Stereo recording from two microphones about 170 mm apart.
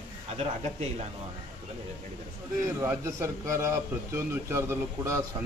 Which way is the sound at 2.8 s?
15° right (ahead or behind).